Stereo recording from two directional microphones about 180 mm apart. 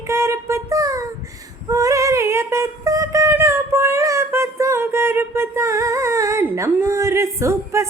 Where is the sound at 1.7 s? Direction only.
20° right (ahead or behind).